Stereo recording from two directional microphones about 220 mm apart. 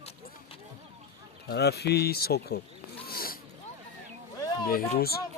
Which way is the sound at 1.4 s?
50° left (ahead or behind).